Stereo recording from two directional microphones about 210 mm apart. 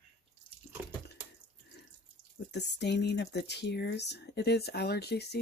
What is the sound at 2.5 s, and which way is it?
Speech, 55° left (ahead or behind).